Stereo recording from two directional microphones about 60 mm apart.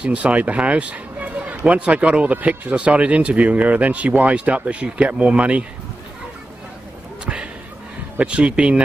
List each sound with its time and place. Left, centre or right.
0.0 s speech: right
8.2 s speech: centre